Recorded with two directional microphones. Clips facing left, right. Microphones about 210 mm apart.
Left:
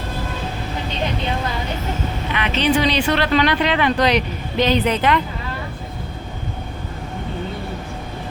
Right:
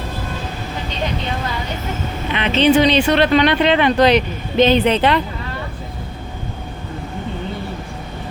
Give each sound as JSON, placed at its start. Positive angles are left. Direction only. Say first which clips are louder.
{"t": 2.3, "sound": "speech", "louder": "right 5 dB", "side_deg": -25}